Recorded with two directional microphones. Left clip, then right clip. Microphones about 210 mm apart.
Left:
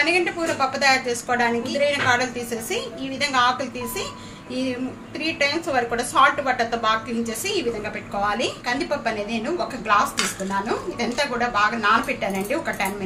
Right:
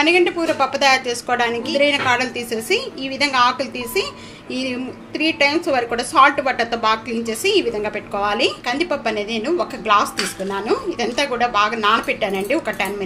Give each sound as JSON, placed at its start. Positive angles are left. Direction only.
{"t": 0.0, "sound": "a woman's voice", "side_deg": -35}